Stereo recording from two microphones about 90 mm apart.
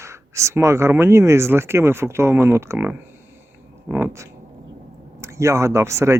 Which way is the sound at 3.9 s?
25° right (ahead or behind).